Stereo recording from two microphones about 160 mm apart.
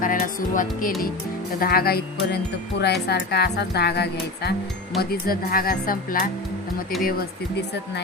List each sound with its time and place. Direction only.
0.0 s speech: 55° left (ahead or behind)
1.5 s speech: 70° left (ahead or behind)
2.8 s speech: 90° left
4.9 s speech: 70° left (ahead or behind)